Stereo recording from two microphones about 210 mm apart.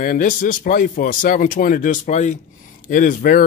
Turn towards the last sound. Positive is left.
turn(degrees=40)  # may be behind; listen again after turning